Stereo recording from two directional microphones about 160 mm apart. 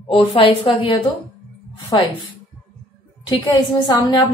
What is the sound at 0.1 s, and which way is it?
Speech, 35° left (ahead or behind).